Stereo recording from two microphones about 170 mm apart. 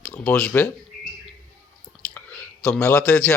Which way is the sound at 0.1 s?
10° left (ahead or behind).